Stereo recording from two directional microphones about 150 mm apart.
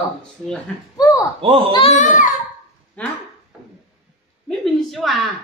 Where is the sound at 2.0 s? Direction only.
60° left (ahead or behind).